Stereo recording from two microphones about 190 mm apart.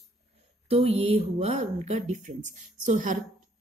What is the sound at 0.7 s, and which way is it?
A woman's voice, 35° right (ahead or behind).